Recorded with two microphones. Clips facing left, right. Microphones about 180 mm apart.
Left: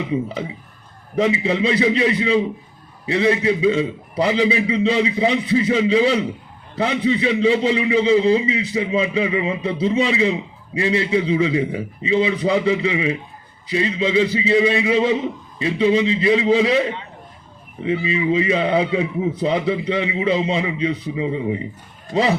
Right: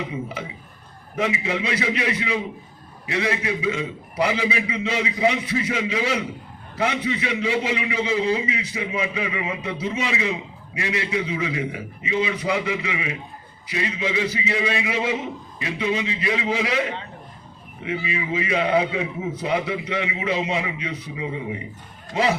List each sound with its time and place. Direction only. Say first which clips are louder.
1.1 s a man's voice: left 6 dB; 30° left (ahead or behind)